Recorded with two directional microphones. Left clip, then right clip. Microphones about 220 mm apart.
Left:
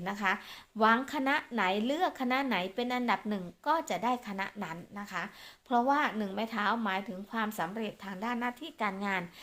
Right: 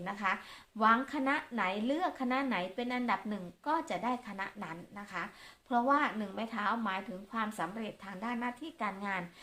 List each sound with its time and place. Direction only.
0.0 s speech: 40° left (ahead or behind)